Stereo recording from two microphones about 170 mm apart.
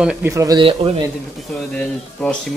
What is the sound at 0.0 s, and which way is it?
Speech, 5° right (ahead or behind).